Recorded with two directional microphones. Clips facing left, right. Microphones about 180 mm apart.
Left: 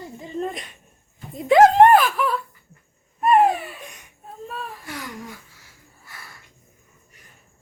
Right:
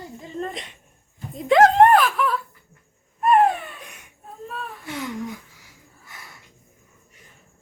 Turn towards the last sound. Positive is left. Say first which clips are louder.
# even
turn(degrees=-20)  # may be behind; listen again after turning